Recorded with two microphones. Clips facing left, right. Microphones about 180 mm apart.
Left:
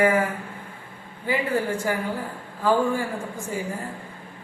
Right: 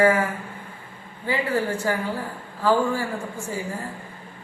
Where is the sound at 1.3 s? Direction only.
10° left (ahead or behind).